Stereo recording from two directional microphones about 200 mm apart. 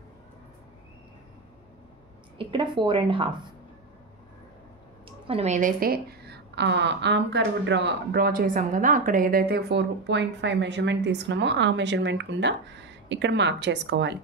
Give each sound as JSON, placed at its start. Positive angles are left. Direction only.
{"t": 2.3, "sound": "a woman's voice", "side_deg": -25}
{"t": 5.2, "sound": "a woman's voice", "side_deg": -30}